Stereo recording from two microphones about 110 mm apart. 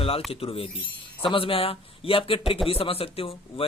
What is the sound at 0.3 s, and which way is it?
A man's voice, 60° left (ahead or behind).